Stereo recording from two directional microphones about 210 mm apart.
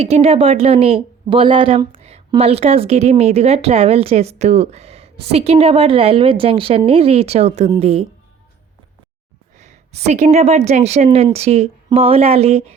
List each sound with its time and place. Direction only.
0.0 s speech: 30° right (ahead or behind)
9.6 s a woman's voice: 30° right (ahead or behind)